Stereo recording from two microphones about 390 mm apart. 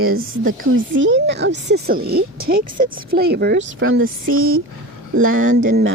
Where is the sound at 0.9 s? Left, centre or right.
Right.